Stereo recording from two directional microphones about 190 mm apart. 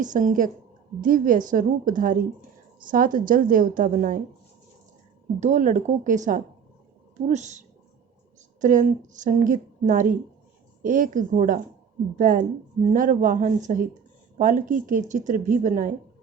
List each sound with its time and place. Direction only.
0.0 s a woman's voice: 40° right (ahead or behind)
5.4 s a woman's voice: 40° right (ahead or behind)
8.6 s a woman's voice: 40° right (ahead or behind)